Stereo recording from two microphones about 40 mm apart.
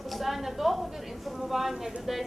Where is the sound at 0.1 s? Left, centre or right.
Centre.